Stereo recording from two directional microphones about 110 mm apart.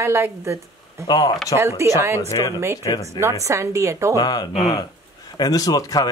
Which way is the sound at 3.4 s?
30° right (ahead or behind).